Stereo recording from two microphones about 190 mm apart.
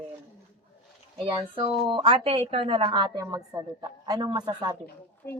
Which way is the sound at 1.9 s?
30° right (ahead or behind).